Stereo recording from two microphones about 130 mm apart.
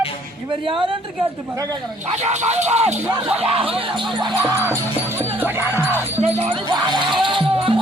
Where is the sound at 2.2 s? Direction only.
60° right (ahead or behind).